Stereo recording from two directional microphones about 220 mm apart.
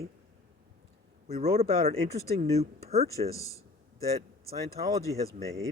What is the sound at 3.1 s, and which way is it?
Speech, 15° left (ahead or behind).